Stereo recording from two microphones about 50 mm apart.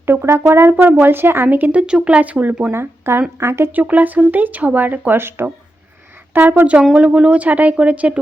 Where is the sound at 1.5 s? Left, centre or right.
Right.